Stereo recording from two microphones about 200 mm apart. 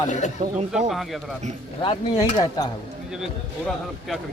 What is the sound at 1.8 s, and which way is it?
Speech, 25° left (ahead or behind).